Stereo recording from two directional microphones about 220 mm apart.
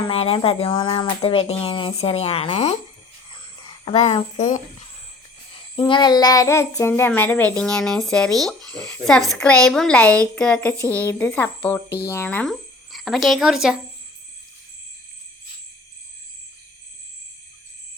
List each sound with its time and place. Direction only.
0.0 s speech: 25° left (ahead or behind)
3.3 s a sound: 20° left (ahead or behind)
5.7 s a child's voice: 20° left (ahead or behind); by 13.7 s centre (ahead or behind)